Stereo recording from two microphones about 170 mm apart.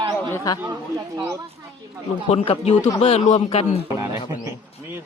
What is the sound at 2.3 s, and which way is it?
A man's voice, 35° left (ahead or behind).